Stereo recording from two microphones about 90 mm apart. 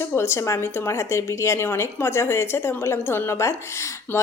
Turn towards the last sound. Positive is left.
turn(degrees=30)  # may be behind; listen again after turning